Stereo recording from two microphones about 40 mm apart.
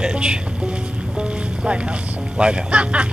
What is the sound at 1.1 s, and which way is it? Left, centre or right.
Music, centre.